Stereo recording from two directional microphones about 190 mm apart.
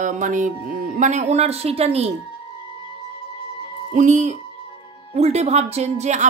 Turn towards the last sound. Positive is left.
turn(degrees=-40)  # may be behind; listen again after turning